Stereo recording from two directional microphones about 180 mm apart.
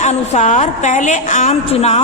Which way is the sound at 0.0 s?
40° left (ahead or behind).